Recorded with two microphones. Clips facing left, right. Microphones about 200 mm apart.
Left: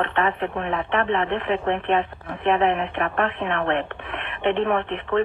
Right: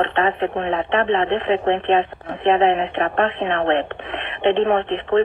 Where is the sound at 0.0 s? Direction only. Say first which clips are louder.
Right 4 dB; 25° right (ahead or behind).